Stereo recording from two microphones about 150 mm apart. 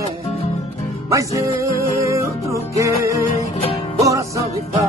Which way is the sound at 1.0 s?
20° right (ahead or behind).